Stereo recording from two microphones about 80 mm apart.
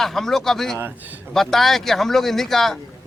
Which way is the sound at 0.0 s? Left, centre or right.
Centre.